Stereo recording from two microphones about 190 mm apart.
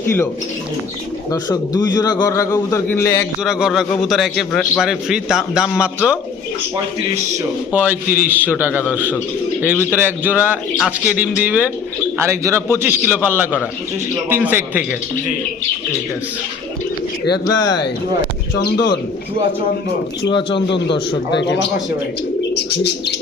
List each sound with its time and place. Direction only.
1.3 s a man's voice: 20° left (ahead or behind)
3.4 s a man's voice: 5° right (ahead or behind)
7.7 s speech: 10° right (ahead or behind)
17.4 s a man's voice: 20° left (ahead or behind)
18.5 s bird: 60° left (ahead or behind)
22.5 s bird: 60° left (ahead or behind)